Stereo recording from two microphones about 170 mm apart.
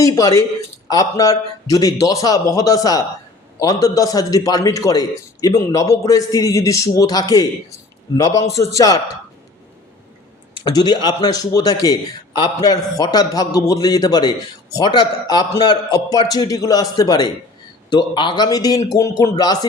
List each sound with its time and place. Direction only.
0.0 s a man's voice: 20° left (ahead or behind)
10.6 s a man's voice: 25° left (ahead or behind)